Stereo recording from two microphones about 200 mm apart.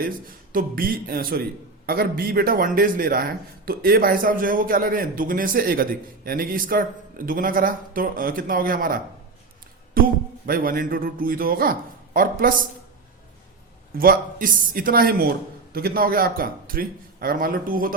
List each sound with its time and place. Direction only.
0.0 s speech: 45° right (ahead or behind)
14.0 s speech: 45° right (ahead or behind)